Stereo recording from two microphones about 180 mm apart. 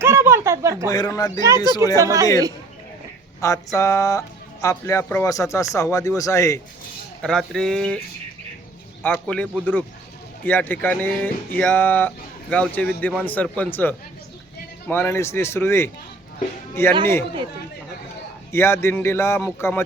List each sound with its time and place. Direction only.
0.0 s a sound: 15° right (ahead or behind)
0.9 s speech: 20° left (ahead or behind)
2.0 s speech: 15° right (ahead or behind)
3.4 s speech: 20° left (ahead or behind)
7.2 s speech: 5° left (ahead or behind)
9.1 s speech: 5° left (ahead or behind)
18.5 s speech: 15° left (ahead or behind)